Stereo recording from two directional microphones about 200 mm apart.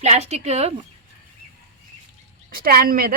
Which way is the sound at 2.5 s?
45° right (ahead or behind).